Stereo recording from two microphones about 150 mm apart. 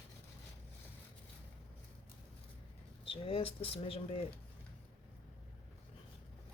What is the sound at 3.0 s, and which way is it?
Speech, 40° left (ahead or behind).